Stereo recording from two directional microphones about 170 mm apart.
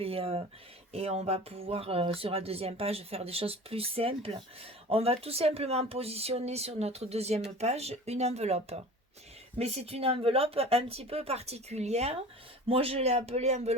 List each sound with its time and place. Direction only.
0.0 s speech: 35° right (ahead or behind)